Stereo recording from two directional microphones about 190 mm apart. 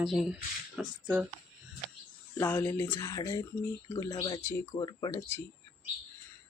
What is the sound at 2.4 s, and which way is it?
Speech, 10° left (ahead or behind).